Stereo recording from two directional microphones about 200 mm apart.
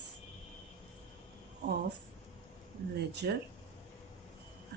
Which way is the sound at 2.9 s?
55° right (ahead or behind).